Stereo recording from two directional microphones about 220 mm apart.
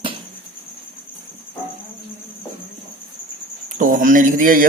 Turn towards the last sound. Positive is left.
turn(degrees=-40)  # may be behind; listen again after turning